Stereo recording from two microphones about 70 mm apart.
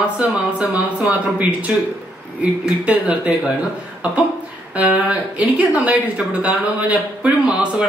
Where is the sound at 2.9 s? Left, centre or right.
Centre.